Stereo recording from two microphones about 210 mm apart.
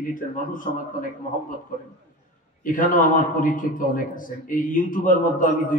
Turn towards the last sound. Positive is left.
turn(degrees=40)  # may be behind; listen again after turning